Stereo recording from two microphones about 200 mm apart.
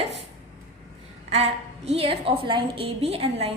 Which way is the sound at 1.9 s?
30° right (ahead or behind).